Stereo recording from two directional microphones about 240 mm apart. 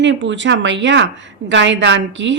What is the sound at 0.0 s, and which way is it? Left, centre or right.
A woman's voice, right.